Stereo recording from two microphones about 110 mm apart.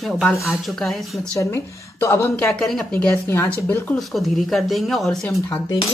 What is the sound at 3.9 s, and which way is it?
Speech, centre (ahead or behind).